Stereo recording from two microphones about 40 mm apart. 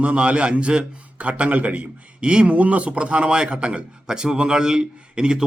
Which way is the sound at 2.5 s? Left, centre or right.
Right.